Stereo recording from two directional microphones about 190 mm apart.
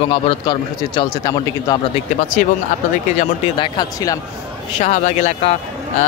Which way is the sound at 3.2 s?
25° left (ahead or behind).